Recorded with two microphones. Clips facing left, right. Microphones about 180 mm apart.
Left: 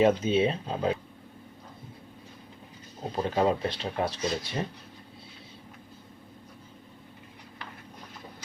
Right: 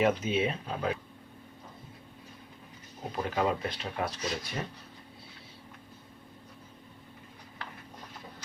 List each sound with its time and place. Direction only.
0.0 s speech: 30° left (ahead or behind)
3.0 s speech: 25° left (ahead or behind)